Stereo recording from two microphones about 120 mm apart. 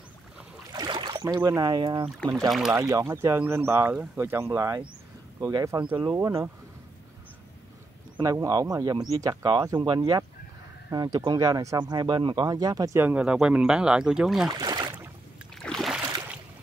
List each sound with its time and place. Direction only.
0.7 s boat: 40° right (ahead or behind)
1.2 s speech: 25° right (ahead or behind)
2.7 s speech: 25° right (ahead or behind)
6.1 s speech: 25° right (ahead or behind)
8.2 s speech: 30° right (ahead or behind)
13.0 s speech: 10° right (ahead or behind)
14.5 s boat: 35° right (ahead or behind)
15.6 s a sound: centre (ahead or behind)